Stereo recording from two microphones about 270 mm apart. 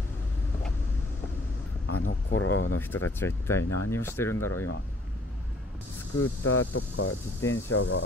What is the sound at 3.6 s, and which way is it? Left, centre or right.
Speech, left.